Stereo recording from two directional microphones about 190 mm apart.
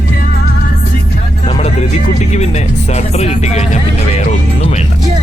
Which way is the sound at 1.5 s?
30° left (ahead or behind).